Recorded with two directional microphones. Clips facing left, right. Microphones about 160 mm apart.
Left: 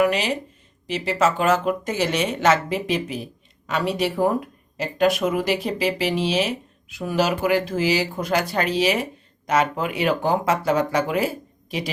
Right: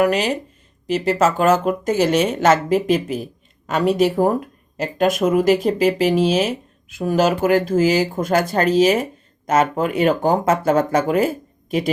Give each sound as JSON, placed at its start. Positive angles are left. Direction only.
{"t": 0.0, "sound": "speech", "side_deg": -45}